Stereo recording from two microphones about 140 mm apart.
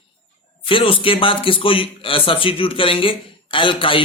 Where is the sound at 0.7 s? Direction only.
40° left (ahead or behind).